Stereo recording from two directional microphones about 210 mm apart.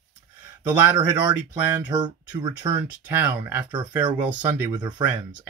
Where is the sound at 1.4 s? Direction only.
5° right (ahead or behind).